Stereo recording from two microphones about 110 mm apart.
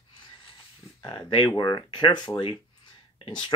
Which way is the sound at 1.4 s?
35° left (ahead or behind).